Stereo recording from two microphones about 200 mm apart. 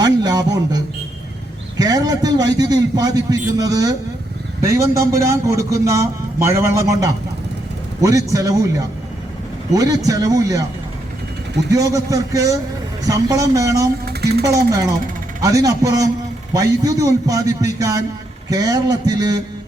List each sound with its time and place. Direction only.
0.0 s speech: 20° right (ahead or behind)
1.8 s a man's voice: 20° right (ahead or behind)
11.7 s a man's voice: 15° right (ahead or behind)
14.0 s music: 55° right (ahead or behind)
14.4 s a man's voice: 15° right (ahead or behind)